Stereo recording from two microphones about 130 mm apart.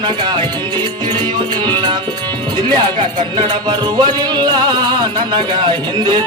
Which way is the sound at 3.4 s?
35° right (ahead or behind).